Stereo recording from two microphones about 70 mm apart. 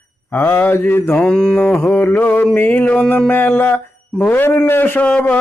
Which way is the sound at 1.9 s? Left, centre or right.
Left.